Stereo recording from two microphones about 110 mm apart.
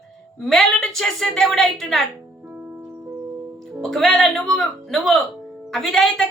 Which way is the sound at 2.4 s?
15° right (ahead or behind).